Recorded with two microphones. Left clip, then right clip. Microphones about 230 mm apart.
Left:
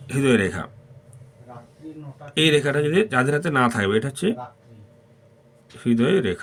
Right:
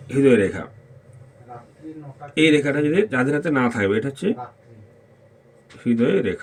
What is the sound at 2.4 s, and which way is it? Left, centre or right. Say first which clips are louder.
Speech: right 1 dB; left.